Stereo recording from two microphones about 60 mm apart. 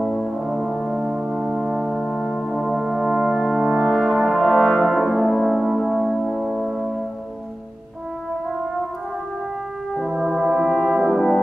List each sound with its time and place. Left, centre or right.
0.0 s brass instrument: centre
1.3 s music: centre
1.8 s brass instrument: centre
5.9 s music: centre
10.0 s brass instrument: centre